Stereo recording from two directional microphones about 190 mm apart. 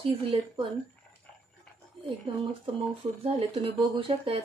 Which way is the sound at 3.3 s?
30° right (ahead or behind).